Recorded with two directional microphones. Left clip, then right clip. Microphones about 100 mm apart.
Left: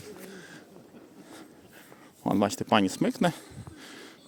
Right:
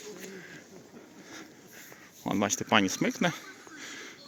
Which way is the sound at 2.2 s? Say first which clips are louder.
Left 3 dB; 50° left (ahead or behind).